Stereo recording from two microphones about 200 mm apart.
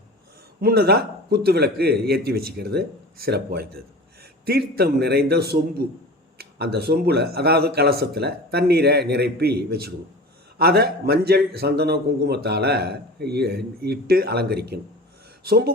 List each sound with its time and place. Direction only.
0.6 s a man's voice: 50° right (ahead or behind)